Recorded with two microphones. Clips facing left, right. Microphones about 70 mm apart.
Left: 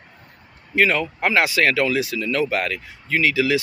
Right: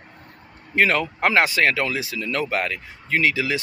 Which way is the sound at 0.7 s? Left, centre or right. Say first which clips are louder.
Left 1 dB; right.